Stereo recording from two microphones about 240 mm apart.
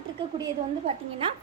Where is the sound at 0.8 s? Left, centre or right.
Right.